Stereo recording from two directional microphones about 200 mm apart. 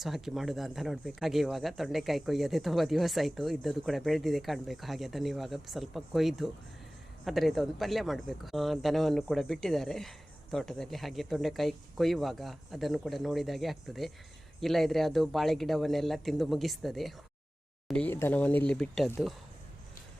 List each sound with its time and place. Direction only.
0.0 s speech: centre (ahead or behind)